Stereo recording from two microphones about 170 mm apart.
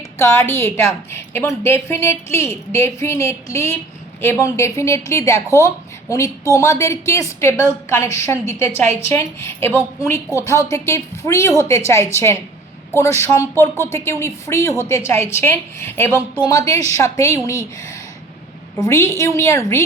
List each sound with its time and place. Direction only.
0.2 s a woman's voice: 15° left (ahead or behind)
18.8 s speech: 15° left (ahead or behind)